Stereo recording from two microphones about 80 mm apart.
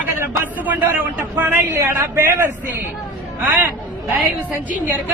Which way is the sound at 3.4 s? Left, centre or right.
Right.